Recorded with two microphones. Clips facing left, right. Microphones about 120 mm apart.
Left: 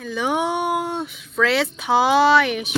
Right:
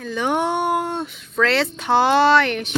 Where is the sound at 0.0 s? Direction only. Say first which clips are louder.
Right 1 dB; 5° left (ahead or behind).